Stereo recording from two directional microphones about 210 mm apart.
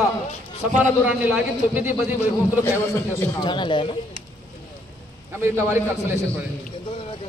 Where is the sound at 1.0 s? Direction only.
10° right (ahead or behind).